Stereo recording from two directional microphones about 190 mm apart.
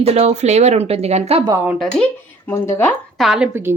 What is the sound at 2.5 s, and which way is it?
Speech, 10° left (ahead or behind).